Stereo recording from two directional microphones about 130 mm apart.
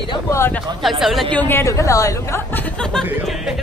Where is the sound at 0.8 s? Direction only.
Centre (ahead or behind).